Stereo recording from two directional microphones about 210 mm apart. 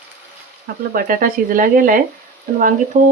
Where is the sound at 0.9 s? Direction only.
40° right (ahead or behind).